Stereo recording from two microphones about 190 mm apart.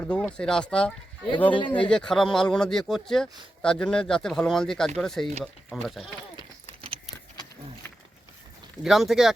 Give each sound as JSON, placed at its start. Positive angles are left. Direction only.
{"t": 0.0, "sound": "speech", "side_deg": 5}
{"t": 1.5, "sound": "speech", "side_deg": 25}
{"t": 1.7, "sound": "speech", "side_deg": 5}
{"t": 8.8, "sound": "speech", "side_deg": 0}